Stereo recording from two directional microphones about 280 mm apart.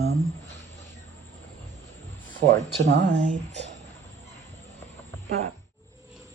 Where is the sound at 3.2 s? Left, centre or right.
Right.